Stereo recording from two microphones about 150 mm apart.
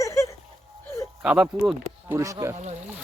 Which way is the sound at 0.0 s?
20° left (ahead or behind).